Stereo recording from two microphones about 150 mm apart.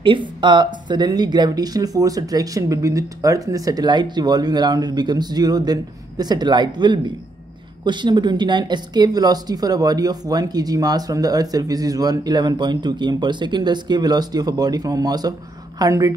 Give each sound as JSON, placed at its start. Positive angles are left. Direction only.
{"t": 0.0, "sound": "speech", "side_deg": -35}